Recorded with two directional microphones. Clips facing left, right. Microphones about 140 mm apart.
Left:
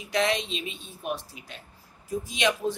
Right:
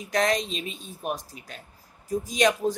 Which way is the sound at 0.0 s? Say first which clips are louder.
Right 2 dB; 45° right (ahead or behind).